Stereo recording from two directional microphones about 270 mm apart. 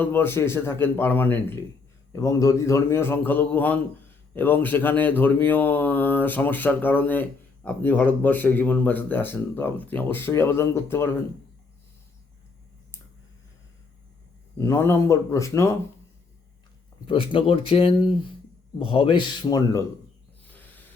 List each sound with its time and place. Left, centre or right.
0.0 s speech: centre
14.6 s speech: centre
17.1 s speech: centre